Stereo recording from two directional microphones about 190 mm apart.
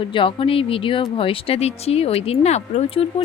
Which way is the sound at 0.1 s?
25° left (ahead or behind).